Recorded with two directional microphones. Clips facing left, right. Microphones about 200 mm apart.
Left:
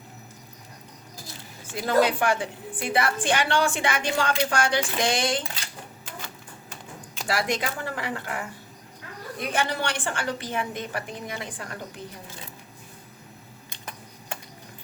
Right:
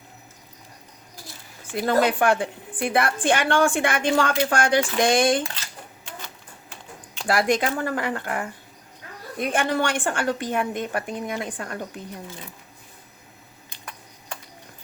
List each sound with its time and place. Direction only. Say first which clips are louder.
2.0 s a woman's voice: right 1 dB; 55° right (ahead or behind)
7.3 s a woman's voice: right 6 dB; 50° right (ahead or behind)